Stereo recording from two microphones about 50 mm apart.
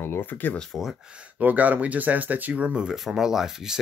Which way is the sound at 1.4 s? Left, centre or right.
Right.